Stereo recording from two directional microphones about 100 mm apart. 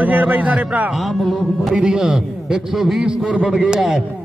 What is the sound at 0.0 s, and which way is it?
Speech, 15° right (ahead or behind).